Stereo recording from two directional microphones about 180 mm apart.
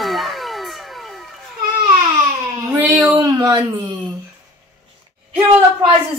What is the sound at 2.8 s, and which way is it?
Speech, 5° right (ahead or behind).